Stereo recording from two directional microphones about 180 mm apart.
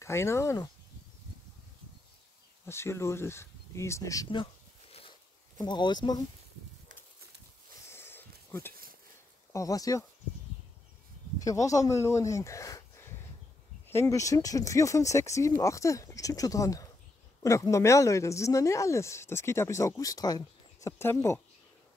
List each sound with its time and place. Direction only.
0.0 s speech: 15° left (ahead or behind)
2.6 s speech: 15° left (ahead or behind)
7.9 s a sound: 10° left (ahead or behind)
9.5 s speech: 20° left (ahead or behind)
11.3 s speech: 20° left (ahead or behind)